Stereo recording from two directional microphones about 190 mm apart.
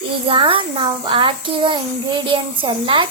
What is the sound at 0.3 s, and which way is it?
A child's voice, 25° right (ahead or behind).